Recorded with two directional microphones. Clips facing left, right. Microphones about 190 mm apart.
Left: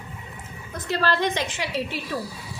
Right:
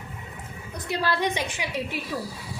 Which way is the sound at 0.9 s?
15° right (ahead or behind).